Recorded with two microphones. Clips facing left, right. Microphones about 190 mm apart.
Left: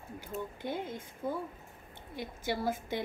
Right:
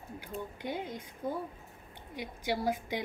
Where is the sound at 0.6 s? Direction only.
15° right (ahead or behind).